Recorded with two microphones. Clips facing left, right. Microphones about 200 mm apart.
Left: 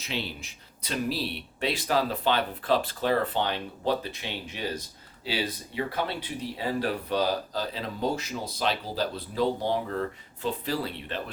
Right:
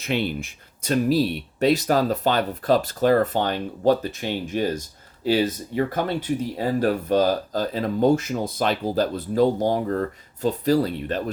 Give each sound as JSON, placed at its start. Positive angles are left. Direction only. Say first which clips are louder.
{"t": 0.0, "sound": "speech", "louder": "right 9 dB", "side_deg": -55}